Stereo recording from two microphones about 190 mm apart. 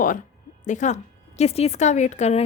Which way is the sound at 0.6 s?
40° left (ahead or behind).